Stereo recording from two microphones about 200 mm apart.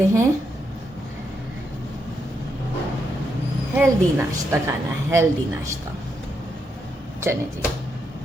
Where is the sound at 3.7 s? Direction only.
10° right (ahead or behind).